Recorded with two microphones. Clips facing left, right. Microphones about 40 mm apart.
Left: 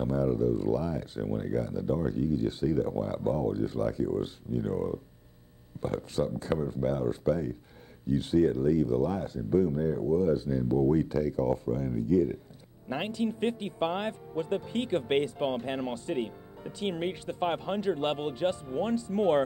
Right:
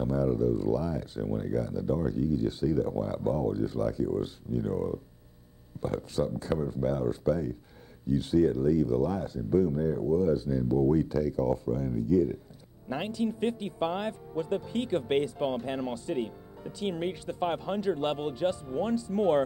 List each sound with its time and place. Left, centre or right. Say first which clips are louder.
0.0 s speech: even; left